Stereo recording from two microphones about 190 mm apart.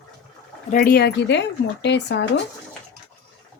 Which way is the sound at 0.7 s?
50° left (ahead or behind).